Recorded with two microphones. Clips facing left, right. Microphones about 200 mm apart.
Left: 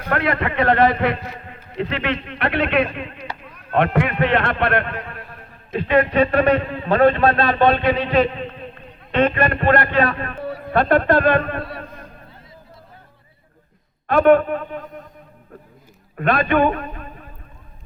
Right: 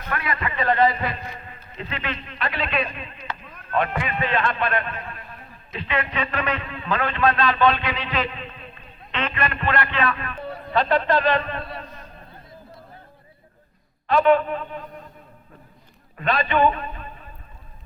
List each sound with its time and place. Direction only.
0.1 s a man's voice: 65° left (ahead or behind); by 7.4 s 30° left (ahead or behind)
7.4 s a man's voice: 50° left (ahead or behind)
10.4 s a man's voice: 55° left (ahead or behind)
14.1 s a man's voice: 50° left (ahead or behind)
16.1 s a man's voice: 55° left (ahead or behind)